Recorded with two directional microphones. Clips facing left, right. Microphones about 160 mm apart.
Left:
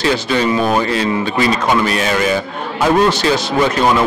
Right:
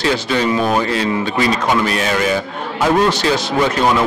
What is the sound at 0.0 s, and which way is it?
A man's voice, 15° left (ahead or behind).